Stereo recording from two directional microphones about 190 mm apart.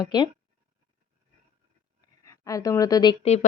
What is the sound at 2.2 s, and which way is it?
Speech, 15° left (ahead or behind).